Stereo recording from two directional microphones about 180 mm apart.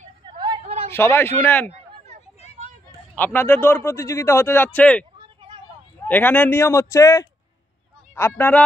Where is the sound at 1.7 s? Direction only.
35° right (ahead or behind).